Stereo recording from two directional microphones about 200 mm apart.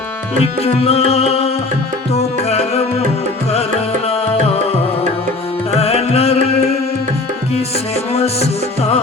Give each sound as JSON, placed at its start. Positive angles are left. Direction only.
{"t": 0.6, "sound": "music", "side_deg": 30}
{"t": 5.8, "sound": "music", "side_deg": 30}
{"t": 8.1, "sound": "music", "side_deg": 30}